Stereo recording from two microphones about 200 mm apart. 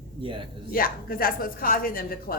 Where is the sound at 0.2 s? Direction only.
25° right (ahead or behind).